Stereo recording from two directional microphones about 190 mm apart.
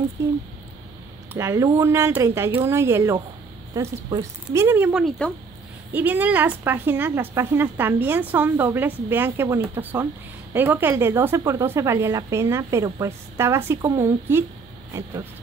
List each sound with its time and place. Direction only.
0.2 s a woman's voice: 15° right (ahead or behind)